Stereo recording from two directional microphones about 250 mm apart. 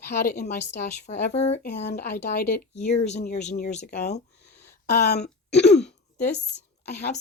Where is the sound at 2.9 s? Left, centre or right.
Left.